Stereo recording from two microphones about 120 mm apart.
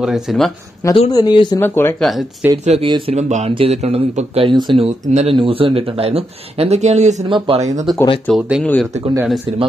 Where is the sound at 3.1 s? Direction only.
70° right (ahead or behind).